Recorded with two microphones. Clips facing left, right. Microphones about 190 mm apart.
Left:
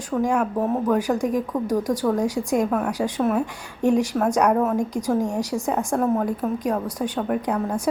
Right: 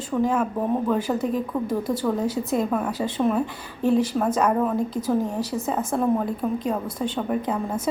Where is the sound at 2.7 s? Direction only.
Centre (ahead or behind); by 5.6 s 15° left (ahead or behind).